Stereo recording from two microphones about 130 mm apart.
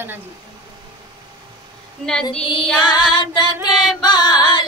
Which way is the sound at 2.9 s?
35° left (ahead or behind).